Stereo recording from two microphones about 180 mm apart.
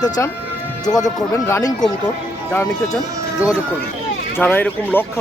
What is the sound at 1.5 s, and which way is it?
Speech, 20° left (ahead or behind).